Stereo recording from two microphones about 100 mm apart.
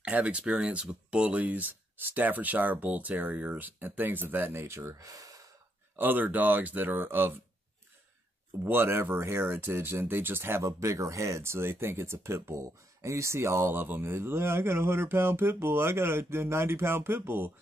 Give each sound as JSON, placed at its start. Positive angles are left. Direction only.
{"t": 0.0, "sound": "speech", "side_deg": -10}
{"t": 5.9, "sound": "speech", "side_deg": -20}
{"t": 8.6, "sound": "speech", "side_deg": -25}